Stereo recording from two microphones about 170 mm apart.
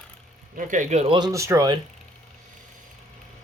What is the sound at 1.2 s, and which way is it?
Speech, 20° right (ahead or behind).